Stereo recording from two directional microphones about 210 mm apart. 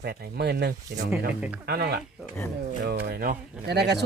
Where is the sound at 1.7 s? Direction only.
50° right (ahead or behind).